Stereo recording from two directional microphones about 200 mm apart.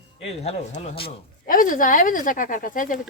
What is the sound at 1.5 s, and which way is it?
Speech, 40° left (ahead or behind).